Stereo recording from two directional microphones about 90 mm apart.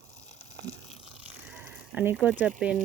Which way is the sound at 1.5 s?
10° right (ahead or behind).